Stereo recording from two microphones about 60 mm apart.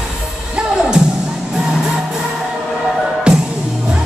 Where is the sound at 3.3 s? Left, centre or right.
Centre.